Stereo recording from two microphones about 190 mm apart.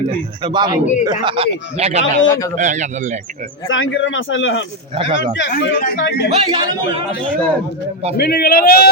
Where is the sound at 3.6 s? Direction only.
90° left.